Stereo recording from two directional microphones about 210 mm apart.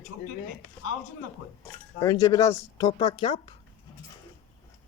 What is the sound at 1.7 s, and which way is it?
Speech, 15° left (ahead or behind).